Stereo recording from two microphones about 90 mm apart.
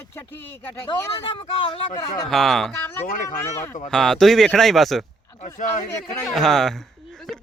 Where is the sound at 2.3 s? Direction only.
5° left (ahead or behind).